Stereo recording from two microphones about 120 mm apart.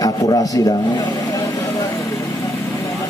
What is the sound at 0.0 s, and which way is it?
Speech, 35° left (ahead or behind).